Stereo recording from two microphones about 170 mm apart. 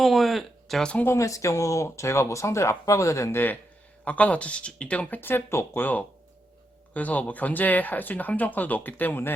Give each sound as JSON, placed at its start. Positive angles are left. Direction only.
{"t": 0.0, "sound": "speech", "side_deg": 0}